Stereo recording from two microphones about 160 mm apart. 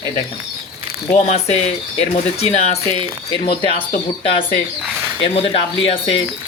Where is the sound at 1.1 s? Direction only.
45° left (ahead or behind).